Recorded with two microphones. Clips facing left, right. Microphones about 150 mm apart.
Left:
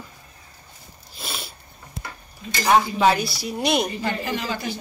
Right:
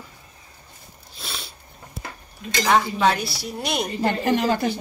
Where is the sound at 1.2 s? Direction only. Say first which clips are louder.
Left 2 dB; 5° left (ahead or behind).